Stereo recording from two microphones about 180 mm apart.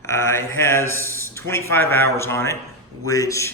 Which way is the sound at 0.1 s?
15° left (ahead or behind).